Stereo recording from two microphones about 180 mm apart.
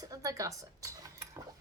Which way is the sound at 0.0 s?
20° right (ahead or behind).